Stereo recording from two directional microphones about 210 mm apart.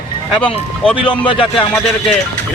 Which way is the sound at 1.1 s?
25° left (ahead or behind).